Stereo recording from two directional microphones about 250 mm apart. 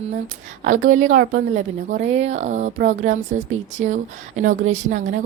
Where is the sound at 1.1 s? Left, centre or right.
Right.